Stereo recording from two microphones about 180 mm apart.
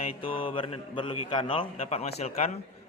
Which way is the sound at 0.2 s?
50° left (ahead or behind).